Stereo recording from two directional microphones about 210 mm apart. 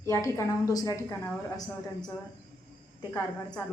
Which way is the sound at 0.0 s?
15° left (ahead or behind).